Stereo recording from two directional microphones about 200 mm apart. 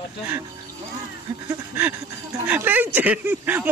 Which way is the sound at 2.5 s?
10° right (ahead or behind).